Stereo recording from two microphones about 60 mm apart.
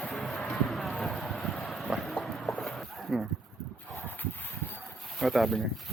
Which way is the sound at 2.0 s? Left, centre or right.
Centre.